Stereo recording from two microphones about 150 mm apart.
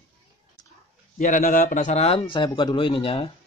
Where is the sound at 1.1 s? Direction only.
60° left (ahead or behind); by 3.3 s 35° left (ahead or behind).